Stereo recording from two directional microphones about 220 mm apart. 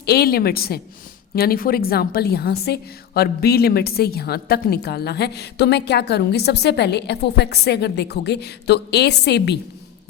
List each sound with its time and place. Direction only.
0.0 s a woman's voice: 45° left (ahead or behind)